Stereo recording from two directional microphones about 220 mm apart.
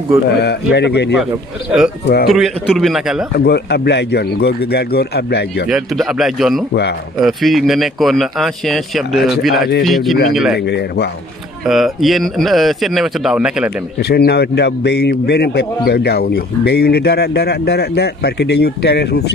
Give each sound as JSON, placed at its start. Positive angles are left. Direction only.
{"t": 0.4, "sound": "a man's voice", "side_deg": 50}
{"t": 2.3, "sound": "speech", "side_deg": 0}
{"t": 3.3, "sound": "a man's voice", "side_deg": 45}
{"t": 5.7, "sound": "speech", "side_deg": 0}
{"t": 6.7, "sound": "a man's voice", "side_deg": 50}
{"t": 7.2, "sound": "speech", "side_deg": 0}
{"t": 10.6, "sound": "a man's voice", "side_deg": 50}
{"t": 11.6, "sound": "speech", "side_deg": 0}
{"t": 13.9, "sound": "a man's voice", "side_deg": 45}